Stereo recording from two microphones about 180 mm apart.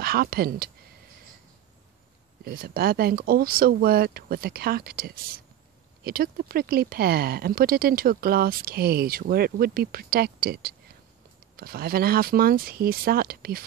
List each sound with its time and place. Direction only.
0.0 s speech: 55° right (ahead or behind)
2.4 s speech: 55° right (ahead or behind)